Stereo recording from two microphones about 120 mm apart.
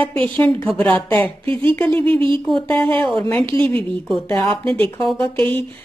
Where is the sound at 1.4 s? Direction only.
45° right (ahead or behind).